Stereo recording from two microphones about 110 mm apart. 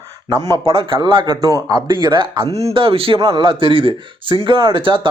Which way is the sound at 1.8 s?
45° right (ahead or behind).